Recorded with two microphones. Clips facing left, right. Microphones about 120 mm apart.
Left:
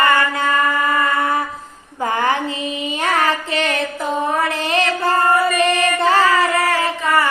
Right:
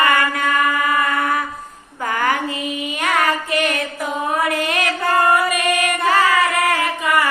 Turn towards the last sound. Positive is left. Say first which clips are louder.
# left 1 dB
turn(degrees=30)  # may be behind; listen again after turning